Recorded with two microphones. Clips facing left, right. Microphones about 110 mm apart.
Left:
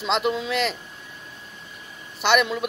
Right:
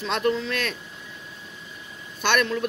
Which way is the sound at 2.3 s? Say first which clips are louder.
Left 3 dB; 10° left (ahead or behind).